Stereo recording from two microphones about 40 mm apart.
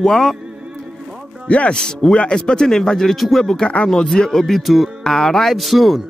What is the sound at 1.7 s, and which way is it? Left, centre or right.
Speech, centre.